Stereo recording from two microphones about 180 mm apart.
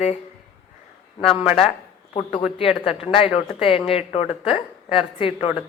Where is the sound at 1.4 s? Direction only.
5° right (ahead or behind).